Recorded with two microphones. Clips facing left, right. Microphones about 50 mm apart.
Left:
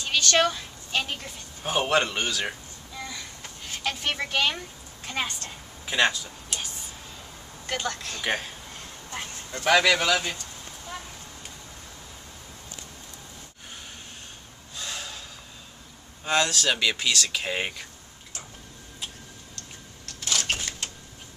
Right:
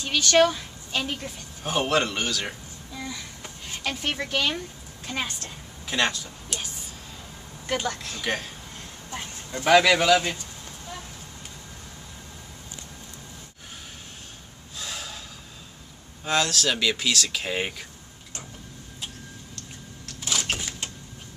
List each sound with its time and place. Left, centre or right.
0.0 s a woman's voice: centre
3.0 s a sound: centre
5.0 s speech: centre
7.6 s speech: centre
8.2 s speech: centre
9.1 s a sound: centre
9.7 s speech: centre
14.8 s gasp: centre
16.3 s speech: centre
20.1 s printer: centre